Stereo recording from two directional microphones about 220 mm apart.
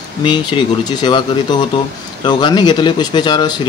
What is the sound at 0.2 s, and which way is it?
A man's voice, 20° left (ahead or behind).